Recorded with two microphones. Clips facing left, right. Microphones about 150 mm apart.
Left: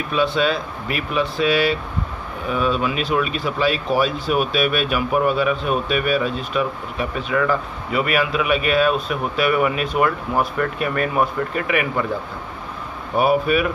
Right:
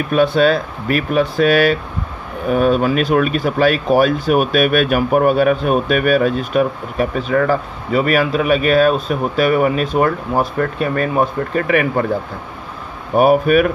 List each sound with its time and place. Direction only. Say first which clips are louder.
0.1 s speech: right 6 dB; 50° right (ahead or behind)
13.1 s speech: right 6 dB; 45° right (ahead or behind)